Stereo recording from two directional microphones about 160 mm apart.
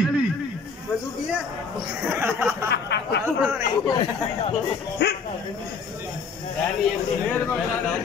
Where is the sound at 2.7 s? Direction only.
90° left.